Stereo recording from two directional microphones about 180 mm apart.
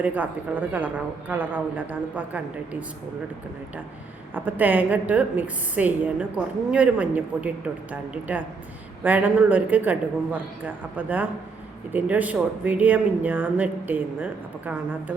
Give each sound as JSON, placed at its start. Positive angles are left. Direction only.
{"t": 0.0, "sound": "a woman's voice", "side_deg": -10}
{"t": 4.4, "sound": "a woman's voice", "side_deg": -10}